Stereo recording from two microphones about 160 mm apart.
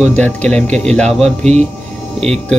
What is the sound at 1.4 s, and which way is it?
Speech, 45° right (ahead or behind).